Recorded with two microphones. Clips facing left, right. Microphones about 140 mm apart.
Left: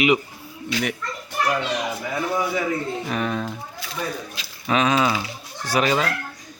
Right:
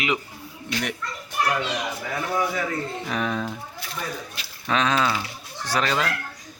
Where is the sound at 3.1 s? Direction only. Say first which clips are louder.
Even; centre (ahead or behind).